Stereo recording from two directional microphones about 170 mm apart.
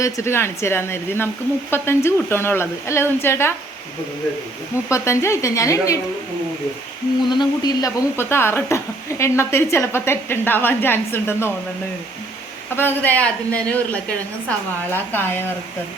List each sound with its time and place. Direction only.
0.0 s speech: 15° left (ahead or behind)
4.9 s speech: 15° left (ahead or behind)
7.3 s speech: 25° left (ahead or behind)
12.7 s speech: 10° left (ahead or behind)